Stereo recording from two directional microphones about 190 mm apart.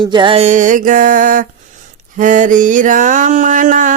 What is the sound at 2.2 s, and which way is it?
Mantra, 45° right (ahead or behind).